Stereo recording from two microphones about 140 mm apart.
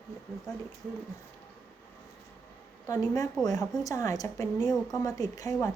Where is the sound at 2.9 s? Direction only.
25° left (ahead or behind).